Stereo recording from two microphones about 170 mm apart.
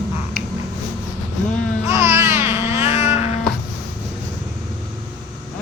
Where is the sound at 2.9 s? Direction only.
35° left (ahead or behind).